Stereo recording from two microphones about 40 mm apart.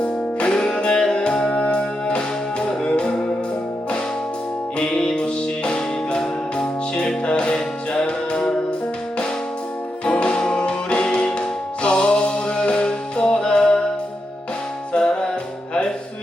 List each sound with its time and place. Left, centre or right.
0.0 s music: left
4.8 s music: left
10.1 s music: left
14.9 s music: left